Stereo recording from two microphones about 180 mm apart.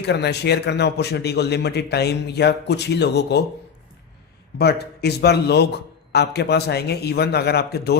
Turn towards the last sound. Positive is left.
turn(degrees=65)  # may be behind; listen again after turning